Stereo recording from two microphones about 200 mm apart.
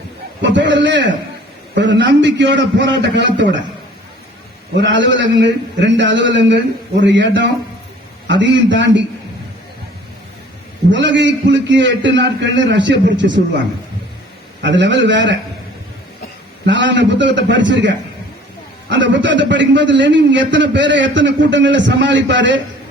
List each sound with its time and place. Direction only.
0.5 s a man's voice: 65° right (ahead or behind)
4.8 s a man's voice: 65° right (ahead or behind)
10.9 s a man's voice: 65° right (ahead or behind)
14.6 s a man's voice: 65° right (ahead or behind)
16.6 s a man's voice: 65° right (ahead or behind)